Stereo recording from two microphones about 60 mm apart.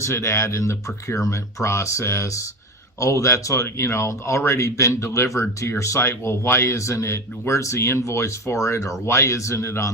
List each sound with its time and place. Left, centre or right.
0.0 s speech: left